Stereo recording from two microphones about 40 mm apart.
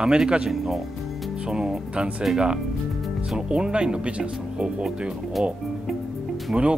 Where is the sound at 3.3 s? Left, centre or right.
Right.